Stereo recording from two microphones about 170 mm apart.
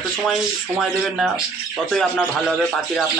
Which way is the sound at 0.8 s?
Centre (ahead or behind).